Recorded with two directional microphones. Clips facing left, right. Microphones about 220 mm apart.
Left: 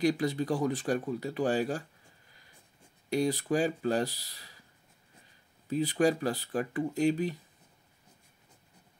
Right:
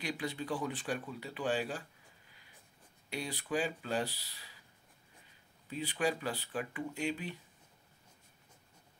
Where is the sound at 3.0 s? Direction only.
40° left (ahead or behind).